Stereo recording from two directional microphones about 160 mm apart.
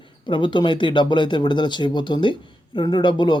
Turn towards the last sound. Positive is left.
turn(degrees=30)  # may be behind; listen again after turning